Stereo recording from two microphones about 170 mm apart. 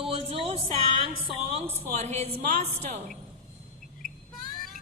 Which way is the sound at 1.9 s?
40° right (ahead or behind).